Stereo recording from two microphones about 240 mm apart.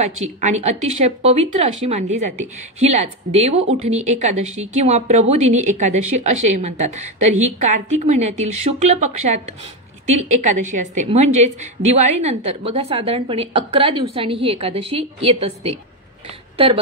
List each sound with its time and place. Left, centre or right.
0.0 s a woman's voice: right